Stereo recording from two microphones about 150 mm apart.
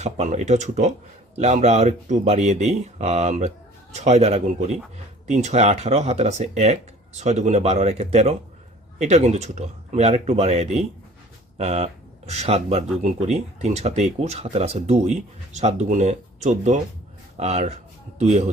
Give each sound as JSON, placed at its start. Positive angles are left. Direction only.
{"t": 0.0, "sound": "speech", "side_deg": -50}